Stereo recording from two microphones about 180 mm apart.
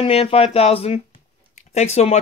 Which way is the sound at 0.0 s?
35° left (ahead or behind).